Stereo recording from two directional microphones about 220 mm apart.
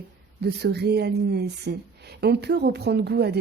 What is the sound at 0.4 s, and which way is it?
A woman's voice, 45° right (ahead or behind).